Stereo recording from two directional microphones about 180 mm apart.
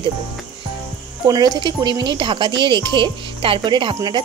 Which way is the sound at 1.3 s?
20° right (ahead or behind).